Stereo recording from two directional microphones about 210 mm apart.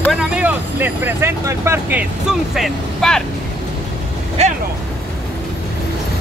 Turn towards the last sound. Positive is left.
turn(degrees=-30)  # may be behind; listen again after turning